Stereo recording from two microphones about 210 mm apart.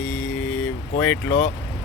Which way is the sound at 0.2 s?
65° left (ahead or behind).